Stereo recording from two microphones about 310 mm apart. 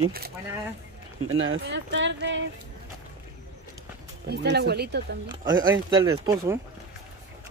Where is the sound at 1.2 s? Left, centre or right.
Right.